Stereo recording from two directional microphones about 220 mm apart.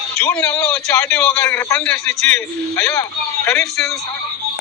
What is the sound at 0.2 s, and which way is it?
A man's voice, 10° left (ahead or behind).